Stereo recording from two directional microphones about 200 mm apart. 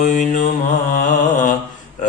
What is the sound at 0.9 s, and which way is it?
Music, 40° left (ahead or behind).